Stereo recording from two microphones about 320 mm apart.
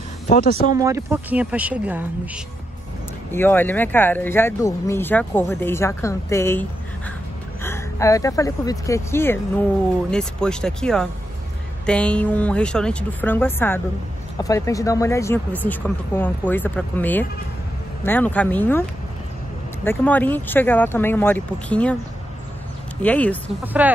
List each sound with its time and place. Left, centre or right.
0.3 s speech: left
0.7 s speech: centre
3.3 s speech: centre
7.6 s speech: centre
23.0 s speech: centre